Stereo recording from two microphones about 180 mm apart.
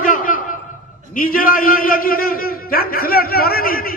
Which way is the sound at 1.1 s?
50° left (ahead or behind).